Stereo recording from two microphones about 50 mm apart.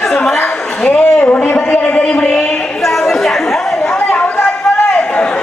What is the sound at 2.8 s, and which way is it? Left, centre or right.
Chatter, centre.